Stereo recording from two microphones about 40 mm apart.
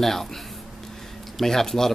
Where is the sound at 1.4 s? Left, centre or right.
Centre.